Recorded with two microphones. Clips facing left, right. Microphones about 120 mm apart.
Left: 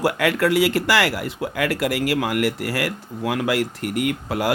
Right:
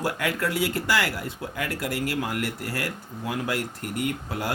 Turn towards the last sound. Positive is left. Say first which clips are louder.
# left 6 dB
turn(degrees=90)